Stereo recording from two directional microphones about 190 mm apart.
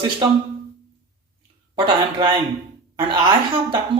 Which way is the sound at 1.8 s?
25° right (ahead or behind).